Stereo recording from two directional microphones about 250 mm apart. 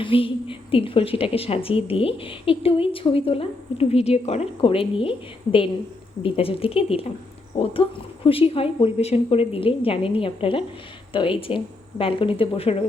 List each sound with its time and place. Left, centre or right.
0.0 s a woman's voice: left